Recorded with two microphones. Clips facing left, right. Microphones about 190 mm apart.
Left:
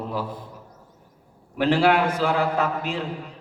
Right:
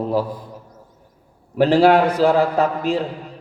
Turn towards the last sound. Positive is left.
turn(degrees=-35)  # may be behind; listen again after turning